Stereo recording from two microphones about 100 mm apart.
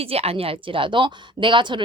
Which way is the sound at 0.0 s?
75° right (ahead or behind).